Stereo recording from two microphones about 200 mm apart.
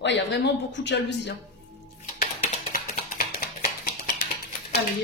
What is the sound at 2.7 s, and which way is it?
Music, 50° left (ahead or behind).